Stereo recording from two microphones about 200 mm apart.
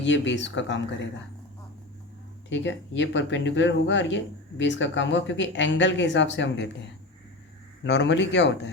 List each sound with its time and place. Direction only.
0.0 s speech: 65° left (ahead or behind)
2.5 s speech: 65° left (ahead or behind)
7.9 s speech: 60° left (ahead or behind)